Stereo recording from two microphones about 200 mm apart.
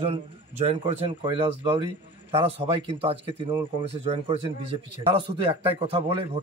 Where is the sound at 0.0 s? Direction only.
30° right (ahead or behind).